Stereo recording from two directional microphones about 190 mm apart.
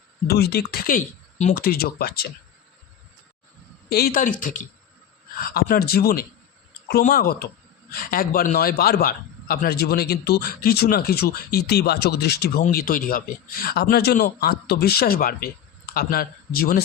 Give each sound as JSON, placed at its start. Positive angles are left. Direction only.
{"t": 0.3, "sound": "speech", "side_deg": 55}
{"t": 1.5, "sound": "speech", "side_deg": 50}
{"t": 3.8, "sound": "a man's voice", "side_deg": 55}